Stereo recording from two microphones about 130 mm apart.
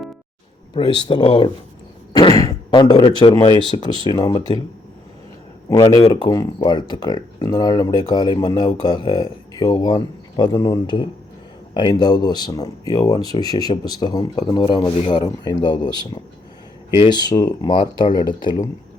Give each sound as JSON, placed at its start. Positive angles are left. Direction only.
{"t": 0.7, "sound": "speech", "side_deg": 40}
{"t": 2.1, "sound": "a sound", "side_deg": 30}
{"t": 3.0, "sound": "speech", "side_deg": 40}
{"t": 5.7, "sound": "speech", "side_deg": 20}